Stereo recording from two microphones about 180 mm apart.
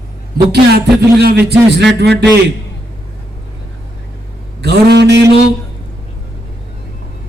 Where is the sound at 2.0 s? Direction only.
70° right (ahead or behind).